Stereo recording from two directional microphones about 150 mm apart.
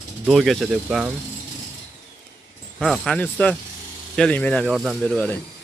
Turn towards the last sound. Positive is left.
turn(degrees=5)  # may be behind; listen again after turning